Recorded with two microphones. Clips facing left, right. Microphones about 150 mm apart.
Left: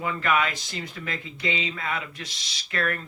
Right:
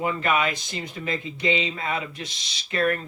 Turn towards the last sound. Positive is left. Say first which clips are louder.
# right 5 dB
turn(degrees=-20)  # may be behind; listen again after turning